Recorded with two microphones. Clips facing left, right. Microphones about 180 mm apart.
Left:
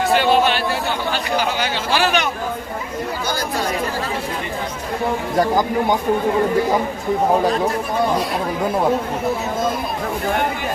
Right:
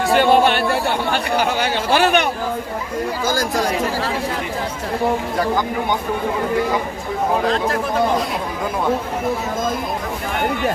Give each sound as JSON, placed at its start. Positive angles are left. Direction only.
{"t": 0.2, "sound": "speech", "side_deg": -55}